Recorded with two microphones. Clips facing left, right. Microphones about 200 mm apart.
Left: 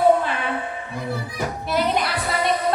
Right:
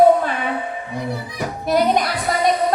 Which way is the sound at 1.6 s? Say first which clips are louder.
Right 5 dB; 45° right (ahead or behind).